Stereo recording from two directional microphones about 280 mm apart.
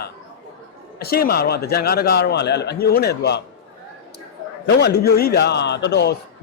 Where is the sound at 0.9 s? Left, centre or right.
Left.